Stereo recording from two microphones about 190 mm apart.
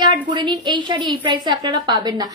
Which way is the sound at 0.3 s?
25° right (ahead or behind).